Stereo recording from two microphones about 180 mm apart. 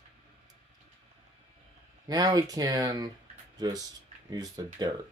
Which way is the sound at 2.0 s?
20° right (ahead or behind).